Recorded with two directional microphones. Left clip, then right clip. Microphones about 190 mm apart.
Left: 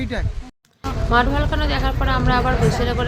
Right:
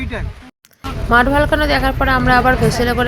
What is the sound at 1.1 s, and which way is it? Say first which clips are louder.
A woman's voice: right 7 dB; 35° right (ahead or behind).